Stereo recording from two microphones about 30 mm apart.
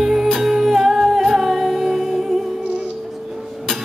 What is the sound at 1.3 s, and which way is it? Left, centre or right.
Music, centre.